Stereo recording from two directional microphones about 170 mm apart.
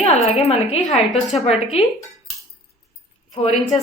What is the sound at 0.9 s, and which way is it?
Speech, centre (ahead or behind).